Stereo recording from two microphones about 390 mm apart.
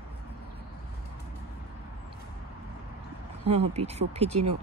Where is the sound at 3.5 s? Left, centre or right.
Centre.